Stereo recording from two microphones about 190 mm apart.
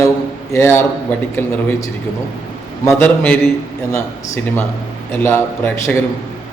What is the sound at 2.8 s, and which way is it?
A man's voice, 15° left (ahead or behind).